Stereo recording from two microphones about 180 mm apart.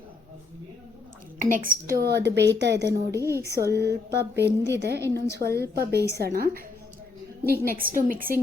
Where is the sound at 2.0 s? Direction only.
65° right (ahead or behind).